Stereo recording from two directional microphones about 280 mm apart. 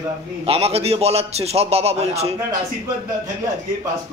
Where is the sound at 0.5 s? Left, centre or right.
Right.